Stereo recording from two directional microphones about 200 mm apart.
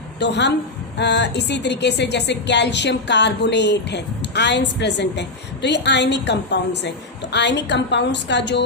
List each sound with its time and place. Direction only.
0.2 s speech: 60° left (ahead or behind)